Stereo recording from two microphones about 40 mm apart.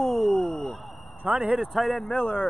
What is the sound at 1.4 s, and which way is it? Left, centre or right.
Speech, centre.